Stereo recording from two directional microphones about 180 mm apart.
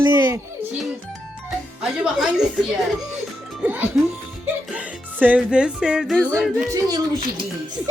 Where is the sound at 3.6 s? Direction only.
10° right (ahead or behind).